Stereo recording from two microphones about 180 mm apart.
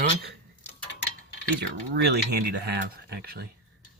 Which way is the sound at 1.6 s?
65° right (ahead or behind).